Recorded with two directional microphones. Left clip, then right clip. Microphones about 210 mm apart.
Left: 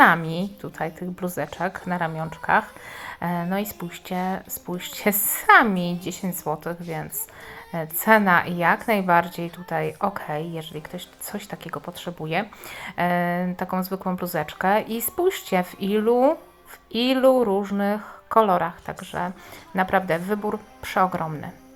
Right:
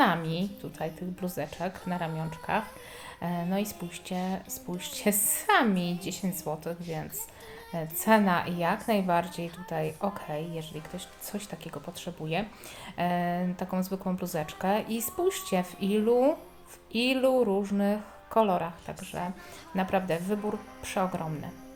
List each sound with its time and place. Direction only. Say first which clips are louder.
0.0 s a woman's voice: left 9 dB; 15° left (ahead or behind)